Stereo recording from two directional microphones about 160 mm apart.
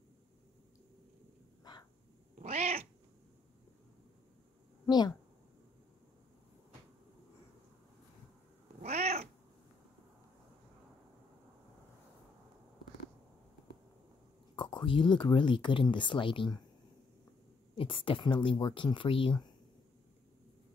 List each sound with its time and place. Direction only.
1.6 s a sound: 25° left (ahead or behind)
2.3 s cat: 40° right (ahead or behind)
4.8 s speech: 25° left (ahead or behind)
8.8 s cat: 45° right (ahead or behind)
14.5 s speech: 30° left (ahead or behind)
17.7 s speech: 35° left (ahead or behind)